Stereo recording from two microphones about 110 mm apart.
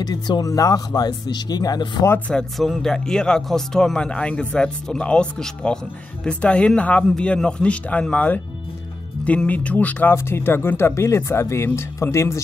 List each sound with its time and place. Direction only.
0.0 s speech: 40° left (ahead or behind)
2.0 s speech: 15° left (ahead or behind)
2.5 s speech: centre (ahead or behind); by 12.4 s 25° left (ahead or behind)